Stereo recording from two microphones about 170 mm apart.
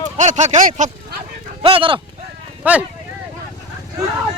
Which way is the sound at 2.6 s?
10° right (ahead or behind).